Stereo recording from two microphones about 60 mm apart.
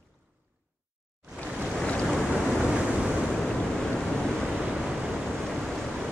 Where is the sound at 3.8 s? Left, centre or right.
Centre.